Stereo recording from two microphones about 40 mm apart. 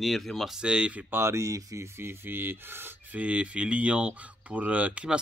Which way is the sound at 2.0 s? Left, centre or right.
Right.